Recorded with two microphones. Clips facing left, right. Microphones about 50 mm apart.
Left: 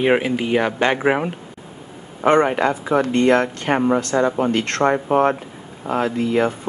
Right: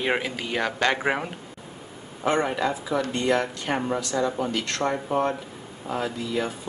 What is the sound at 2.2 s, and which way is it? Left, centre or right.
Speech, left.